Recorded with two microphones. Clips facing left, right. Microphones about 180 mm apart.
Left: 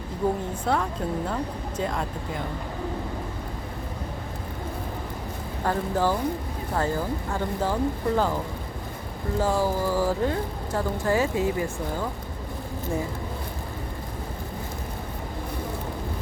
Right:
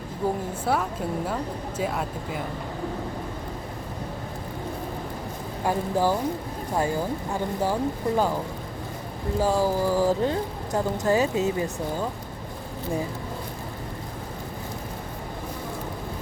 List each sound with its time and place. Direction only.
0.2 s speech: 5° right (ahead or behind)
5.6 s speech: 10° right (ahead or behind)
9.4 s speech: 15° right (ahead or behind)